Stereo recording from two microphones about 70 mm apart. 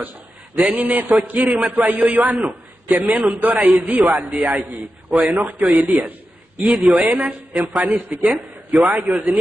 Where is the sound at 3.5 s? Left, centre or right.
Centre; by 4.6 s right.